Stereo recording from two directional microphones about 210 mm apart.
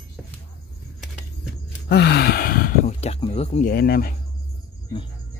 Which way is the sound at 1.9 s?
50° left (ahead or behind).